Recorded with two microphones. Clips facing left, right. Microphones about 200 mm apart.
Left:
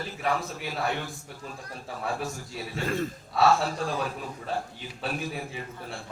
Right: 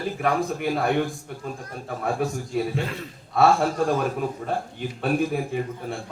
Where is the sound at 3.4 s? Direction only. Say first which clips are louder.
Right 4 dB; 50° right (ahead or behind).